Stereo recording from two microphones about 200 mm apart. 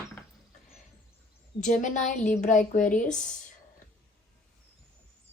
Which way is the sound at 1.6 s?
40° left (ahead or behind).